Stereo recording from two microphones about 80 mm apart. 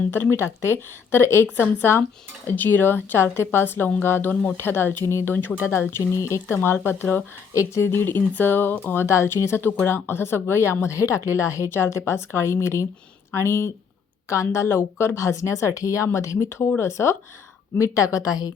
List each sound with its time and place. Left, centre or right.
0.1 s speech: left
5.3 s speech: left
5.9 s a woman's voice: left